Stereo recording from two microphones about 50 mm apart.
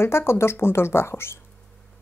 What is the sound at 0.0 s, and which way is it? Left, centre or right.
A woman's voice, left.